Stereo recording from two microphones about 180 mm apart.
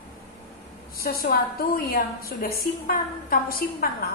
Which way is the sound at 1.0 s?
55° left (ahead or behind).